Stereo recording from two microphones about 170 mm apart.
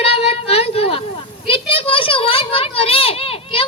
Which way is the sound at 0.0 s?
35° left (ahead or behind).